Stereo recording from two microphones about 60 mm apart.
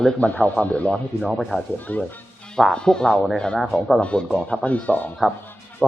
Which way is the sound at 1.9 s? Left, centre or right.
Left.